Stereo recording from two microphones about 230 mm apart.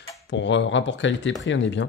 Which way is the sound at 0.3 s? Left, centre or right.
Left.